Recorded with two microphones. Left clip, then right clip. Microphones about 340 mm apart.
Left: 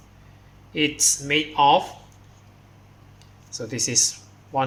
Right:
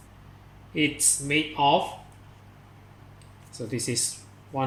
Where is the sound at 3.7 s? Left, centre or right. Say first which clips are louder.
Left 8 dB; centre.